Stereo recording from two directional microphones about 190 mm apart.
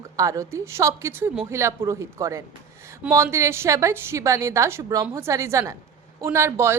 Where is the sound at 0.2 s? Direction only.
15° right (ahead or behind).